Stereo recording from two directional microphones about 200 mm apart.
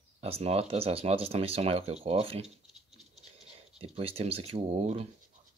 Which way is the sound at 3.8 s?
30° right (ahead or behind).